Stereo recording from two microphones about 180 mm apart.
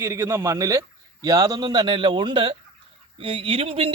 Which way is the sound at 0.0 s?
15° right (ahead or behind).